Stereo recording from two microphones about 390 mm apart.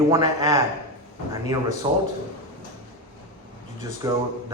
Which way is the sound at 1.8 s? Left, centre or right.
Centre.